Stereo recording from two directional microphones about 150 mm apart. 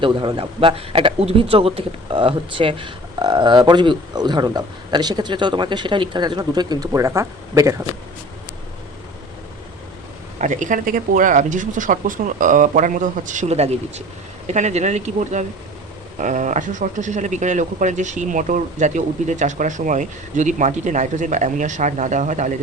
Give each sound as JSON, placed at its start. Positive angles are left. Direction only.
{"t": 0.0, "sound": "speech", "side_deg": -35}
{"t": 10.3, "sound": "speech", "side_deg": -55}